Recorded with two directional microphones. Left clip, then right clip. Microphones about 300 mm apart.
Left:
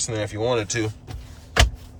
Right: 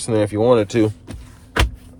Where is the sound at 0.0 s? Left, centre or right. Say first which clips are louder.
Right 8 dB; centre.